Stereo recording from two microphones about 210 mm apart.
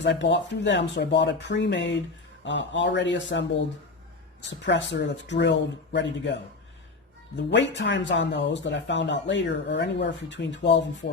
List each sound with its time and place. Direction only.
0.0 s speech: 55° left (ahead or behind)
4.4 s speech: 60° left (ahead or behind)